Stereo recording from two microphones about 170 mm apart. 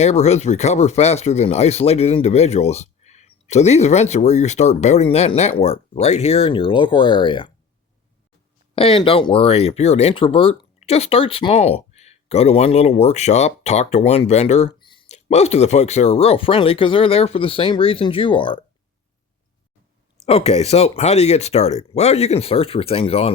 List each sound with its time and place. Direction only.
0.0 s speech: 40° left (ahead or behind)
8.7 s speech: 30° left (ahead or behind)
15.0 s speech: 40° left (ahead or behind)
20.2 s speech: 35° left (ahead or behind)